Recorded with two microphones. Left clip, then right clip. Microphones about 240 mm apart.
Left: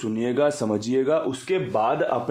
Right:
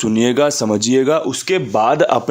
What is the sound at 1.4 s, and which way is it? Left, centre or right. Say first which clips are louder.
Speech: right 8 dB; right.